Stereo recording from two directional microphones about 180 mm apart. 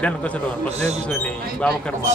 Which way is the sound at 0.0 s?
5° left (ahead or behind).